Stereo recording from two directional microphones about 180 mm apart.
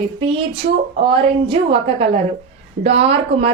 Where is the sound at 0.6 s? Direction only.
45° right (ahead or behind).